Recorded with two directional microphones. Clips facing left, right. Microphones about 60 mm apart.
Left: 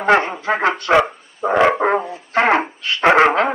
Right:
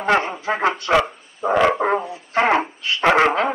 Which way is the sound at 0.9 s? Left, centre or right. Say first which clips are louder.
Left 3 dB; centre.